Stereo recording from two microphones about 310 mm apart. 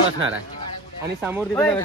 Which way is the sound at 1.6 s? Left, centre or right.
Centre.